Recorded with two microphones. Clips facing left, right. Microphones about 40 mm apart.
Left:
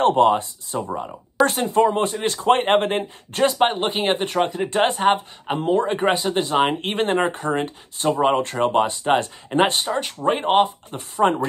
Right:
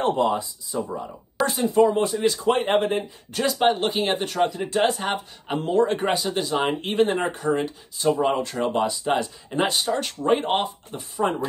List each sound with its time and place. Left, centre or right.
0.2 s speech: left
3.4 s speech: left
5.5 s speech: centre
6.1 s speech: left
6.8 s speech: left
9.8 s speech: centre
10.9 s speech: left